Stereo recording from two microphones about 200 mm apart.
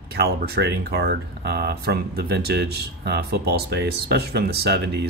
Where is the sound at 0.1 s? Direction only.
55° right (ahead or behind).